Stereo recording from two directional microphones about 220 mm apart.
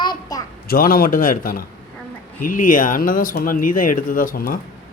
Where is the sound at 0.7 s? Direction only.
40° left (ahead or behind).